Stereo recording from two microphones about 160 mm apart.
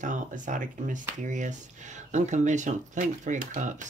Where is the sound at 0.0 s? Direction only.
50° right (ahead or behind).